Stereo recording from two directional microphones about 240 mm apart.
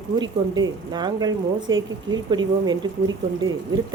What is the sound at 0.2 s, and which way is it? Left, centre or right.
A woman's voice, centre.